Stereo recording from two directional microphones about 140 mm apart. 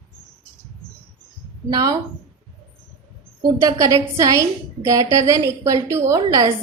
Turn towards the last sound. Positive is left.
turn(degrees=-25)  # may be behind; listen again after turning